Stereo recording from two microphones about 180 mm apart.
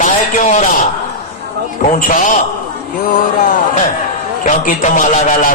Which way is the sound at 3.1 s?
50° left (ahead or behind).